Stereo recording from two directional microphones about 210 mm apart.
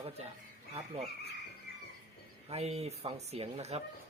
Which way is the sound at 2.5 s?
30° right (ahead or behind).